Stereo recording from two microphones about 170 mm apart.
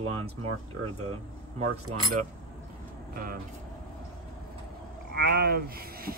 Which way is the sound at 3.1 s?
60° right (ahead or behind).